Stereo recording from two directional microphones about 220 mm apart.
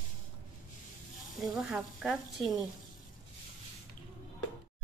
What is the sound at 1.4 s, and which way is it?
Speech, centre (ahead or behind).